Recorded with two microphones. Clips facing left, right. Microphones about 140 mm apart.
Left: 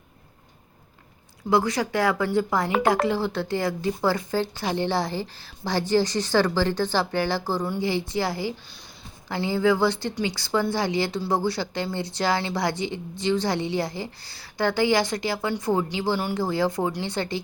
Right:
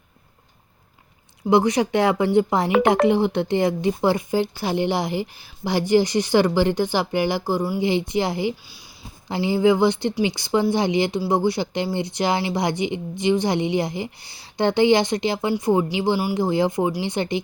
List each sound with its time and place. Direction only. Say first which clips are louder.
1.5 s speech: right 5 dB; 20° right (ahead or behind)